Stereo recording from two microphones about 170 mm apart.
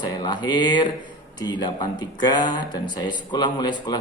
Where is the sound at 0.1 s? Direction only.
25° left (ahead or behind).